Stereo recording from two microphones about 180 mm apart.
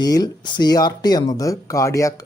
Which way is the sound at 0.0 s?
20° left (ahead or behind).